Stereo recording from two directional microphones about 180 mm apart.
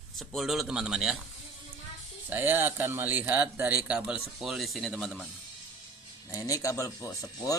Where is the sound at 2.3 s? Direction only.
10° right (ahead or behind).